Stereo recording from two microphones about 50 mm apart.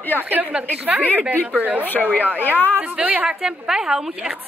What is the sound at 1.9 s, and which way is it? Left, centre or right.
Speech, left.